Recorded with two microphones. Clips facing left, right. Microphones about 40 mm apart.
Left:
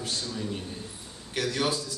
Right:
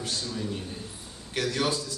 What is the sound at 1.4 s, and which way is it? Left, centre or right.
Speech, centre.